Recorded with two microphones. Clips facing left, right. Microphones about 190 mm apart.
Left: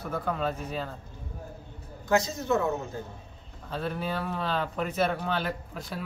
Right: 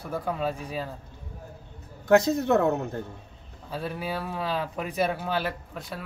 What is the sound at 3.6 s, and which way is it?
A man's voice, 10° right (ahead or behind).